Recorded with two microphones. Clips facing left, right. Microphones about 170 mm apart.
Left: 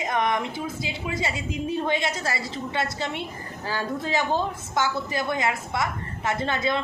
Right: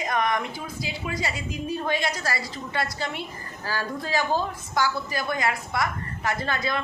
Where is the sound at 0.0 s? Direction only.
25° left (ahead or behind).